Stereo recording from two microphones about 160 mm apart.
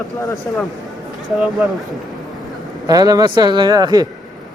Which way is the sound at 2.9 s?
20° right (ahead or behind).